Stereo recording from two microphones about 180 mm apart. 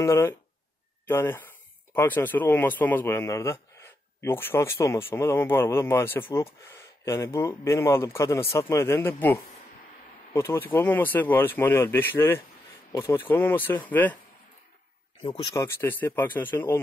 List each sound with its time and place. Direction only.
0.0 s a man's voice: 15° left (ahead or behind)
15.2 s a man's voice: 25° left (ahead or behind)